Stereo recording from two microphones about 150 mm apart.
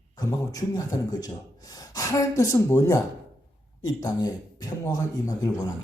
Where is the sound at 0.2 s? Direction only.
25° left (ahead or behind).